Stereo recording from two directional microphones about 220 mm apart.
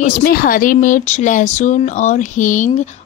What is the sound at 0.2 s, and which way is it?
Speech, 40° left (ahead or behind).